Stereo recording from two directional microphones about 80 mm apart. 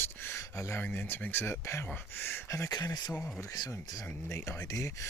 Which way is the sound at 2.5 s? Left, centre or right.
Left.